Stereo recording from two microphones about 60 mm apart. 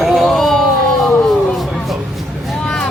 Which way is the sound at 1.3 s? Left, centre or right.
Centre.